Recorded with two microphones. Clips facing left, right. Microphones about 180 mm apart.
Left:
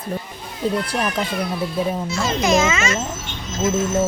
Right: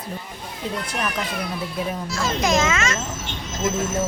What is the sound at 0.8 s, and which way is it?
Speech, 30° left (ahead or behind).